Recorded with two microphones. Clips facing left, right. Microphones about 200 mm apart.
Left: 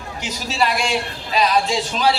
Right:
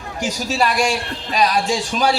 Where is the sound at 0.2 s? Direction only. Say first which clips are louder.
Right 3 dB; 45° right (ahead or behind).